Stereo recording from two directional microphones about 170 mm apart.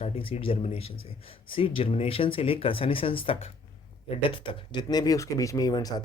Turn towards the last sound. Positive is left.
turn(degrees=25)  # may be behind; listen again after turning